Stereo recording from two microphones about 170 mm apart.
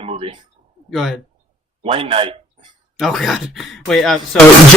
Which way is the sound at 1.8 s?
35° right (ahead or behind).